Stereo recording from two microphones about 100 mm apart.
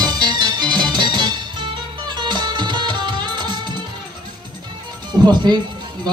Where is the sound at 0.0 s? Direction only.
45° right (ahead or behind).